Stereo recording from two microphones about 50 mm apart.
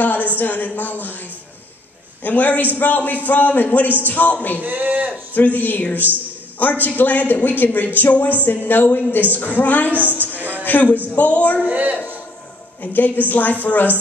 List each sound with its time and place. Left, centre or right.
0.0 s speech: left
2.2 s a man's voice: left
4.6 s a man's voice: right
5.3 s a man's voice: left
11.6 s a woman's voice: right
12.8 s a man's voice: left